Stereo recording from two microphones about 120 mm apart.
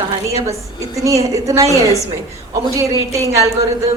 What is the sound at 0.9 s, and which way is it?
Speech, 25° right (ahead or behind).